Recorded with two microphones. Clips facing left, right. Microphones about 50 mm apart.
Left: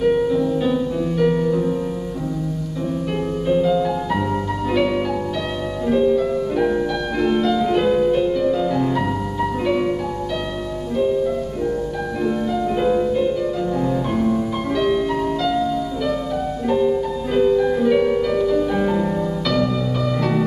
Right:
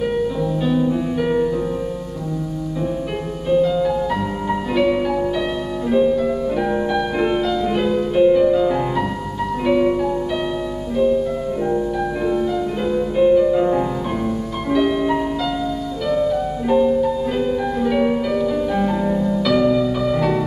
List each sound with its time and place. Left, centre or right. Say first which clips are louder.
0.0 s music: left 3 dB; centre
3.4 s music: right 2 dB; centre
8.1 s music: right 4 dB; centre
11.0 s music: right 2 dB; centre
13.1 s music: right 6 dB; centre
14.7 s music: right 3 dB; centre
16.6 s music: right 3 dB; centre